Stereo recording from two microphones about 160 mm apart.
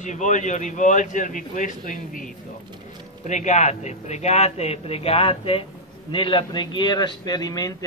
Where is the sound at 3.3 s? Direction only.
45° left (ahead or behind).